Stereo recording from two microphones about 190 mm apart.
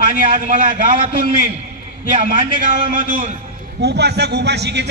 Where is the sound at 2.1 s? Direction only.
45° right (ahead or behind).